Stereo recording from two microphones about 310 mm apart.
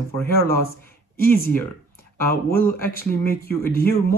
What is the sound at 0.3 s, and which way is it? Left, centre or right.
Speech, left.